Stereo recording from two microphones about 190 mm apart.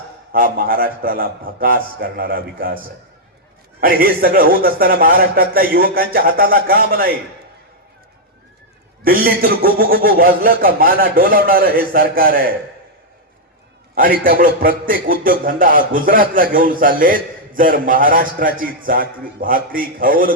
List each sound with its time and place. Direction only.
0.3 s a man's voice: 50° right (ahead or behind)
9.0 s a man's voice: 50° right (ahead or behind)
13.9 s a man's voice: 50° right (ahead or behind)